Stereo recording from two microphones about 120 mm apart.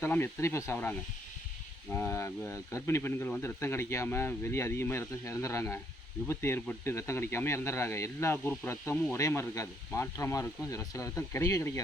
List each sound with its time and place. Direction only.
0.0 s speech: 20° left (ahead or behind)